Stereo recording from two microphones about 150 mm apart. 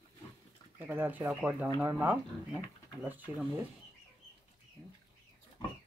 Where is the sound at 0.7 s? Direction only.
15° right (ahead or behind).